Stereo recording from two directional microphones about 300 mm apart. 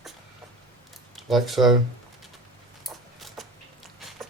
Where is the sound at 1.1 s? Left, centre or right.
Centre.